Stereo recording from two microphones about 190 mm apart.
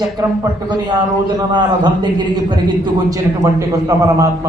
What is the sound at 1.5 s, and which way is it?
Speech, 25° right (ahead or behind).